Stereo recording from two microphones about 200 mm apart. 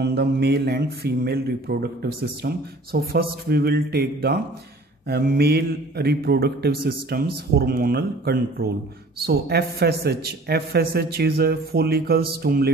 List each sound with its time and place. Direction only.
0.0 s speech: 55° right (ahead or behind)